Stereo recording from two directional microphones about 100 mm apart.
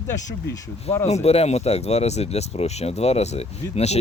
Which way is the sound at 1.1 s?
90° left.